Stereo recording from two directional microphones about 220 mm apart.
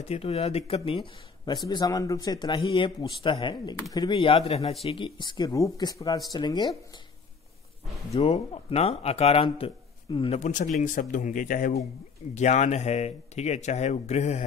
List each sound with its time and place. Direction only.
0.1 s speech: 30° left (ahead or behind)
8.1 s speech: 30° left (ahead or behind)